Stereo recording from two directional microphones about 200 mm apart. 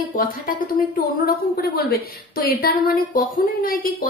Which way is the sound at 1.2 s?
50° left (ahead or behind).